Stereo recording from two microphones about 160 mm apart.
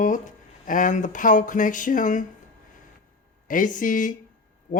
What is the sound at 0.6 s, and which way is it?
Speech, 55° left (ahead or behind).